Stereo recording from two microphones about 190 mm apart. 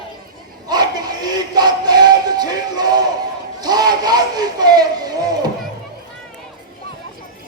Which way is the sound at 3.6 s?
20° right (ahead or behind).